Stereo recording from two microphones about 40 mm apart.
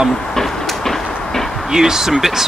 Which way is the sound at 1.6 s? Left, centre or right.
Centre.